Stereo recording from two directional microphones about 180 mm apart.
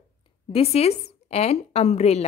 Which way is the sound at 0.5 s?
35° left (ahead or behind).